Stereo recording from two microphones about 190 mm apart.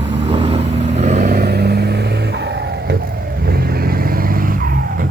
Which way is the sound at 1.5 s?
60° right (ahead or behind).